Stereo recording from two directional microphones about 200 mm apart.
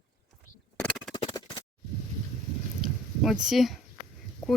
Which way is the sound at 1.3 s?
15° left (ahead or behind).